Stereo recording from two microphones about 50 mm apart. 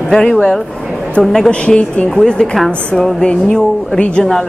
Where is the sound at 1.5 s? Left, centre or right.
Left.